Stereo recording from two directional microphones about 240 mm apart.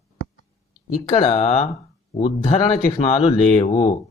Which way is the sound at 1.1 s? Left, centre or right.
Left.